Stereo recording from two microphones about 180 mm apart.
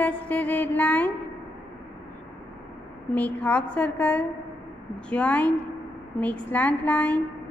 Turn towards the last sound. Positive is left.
turn(degrees=10)  # may be behind; listen again after turning